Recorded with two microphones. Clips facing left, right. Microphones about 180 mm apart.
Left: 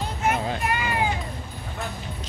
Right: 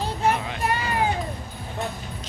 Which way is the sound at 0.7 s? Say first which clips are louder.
Right 5 dB; 35° right (ahead or behind).